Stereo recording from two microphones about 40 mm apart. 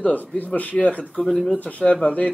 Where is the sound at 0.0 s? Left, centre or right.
Left.